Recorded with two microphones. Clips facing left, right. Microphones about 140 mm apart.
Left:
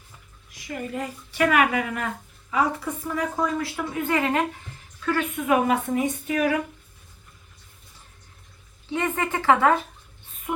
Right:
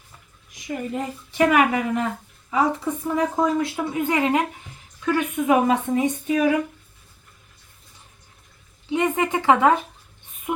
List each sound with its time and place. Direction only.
0.5 s a woman's voice: 20° right (ahead or behind)
8.9 s speech: 15° right (ahead or behind)